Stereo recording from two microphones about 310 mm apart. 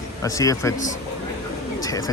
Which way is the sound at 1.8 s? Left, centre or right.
Centre.